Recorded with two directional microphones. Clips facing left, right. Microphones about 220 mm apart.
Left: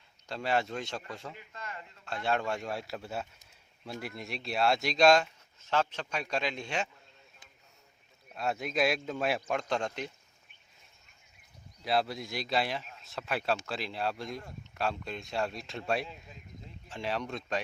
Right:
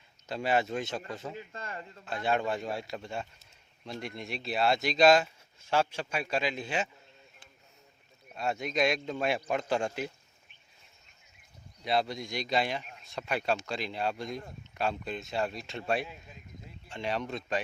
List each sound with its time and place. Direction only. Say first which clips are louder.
0.3 s speech: right 2 dB; 5° right (ahead or behind)
0.9 s speech: right 4 dB; 20° right (ahead or behind)
2.2 s speech: right 2 dB; centre (ahead or behind)
8.3 s speech: right 1 dB; centre (ahead or behind)
11.8 s speech: even; centre (ahead or behind)